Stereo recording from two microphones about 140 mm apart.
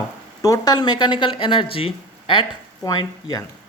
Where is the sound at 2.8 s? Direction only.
25° left (ahead or behind).